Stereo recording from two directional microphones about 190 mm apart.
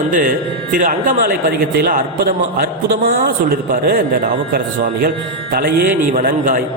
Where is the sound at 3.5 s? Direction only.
50° right (ahead or behind).